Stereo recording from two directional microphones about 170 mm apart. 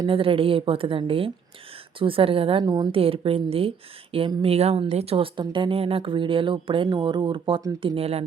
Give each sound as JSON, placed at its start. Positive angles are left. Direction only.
{"t": 0.0, "sound": "speech", "side_deg": -30}